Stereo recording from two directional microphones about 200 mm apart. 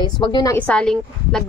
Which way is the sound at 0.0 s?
20° left (ahead or behind).